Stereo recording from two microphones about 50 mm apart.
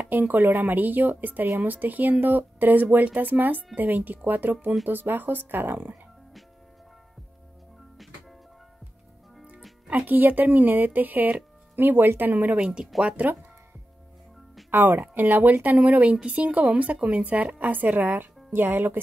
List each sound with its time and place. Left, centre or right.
0.1 s speech: right
9.8 s speech: right
12.5 s speech: centre
13.0 s speech: right
14.7 s speech: right